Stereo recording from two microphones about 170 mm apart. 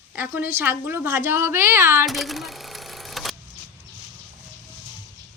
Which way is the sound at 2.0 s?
Centre (ahead or behind).